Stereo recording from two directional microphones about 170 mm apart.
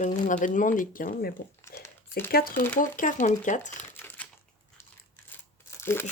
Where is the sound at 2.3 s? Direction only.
60° left (ahead or behind).